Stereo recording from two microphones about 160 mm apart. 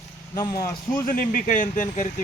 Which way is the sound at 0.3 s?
25° left (ahead or behind).